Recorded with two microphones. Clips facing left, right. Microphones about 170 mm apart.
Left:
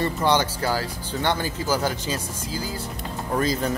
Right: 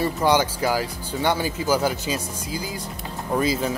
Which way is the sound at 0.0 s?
10° right (ahead or behind).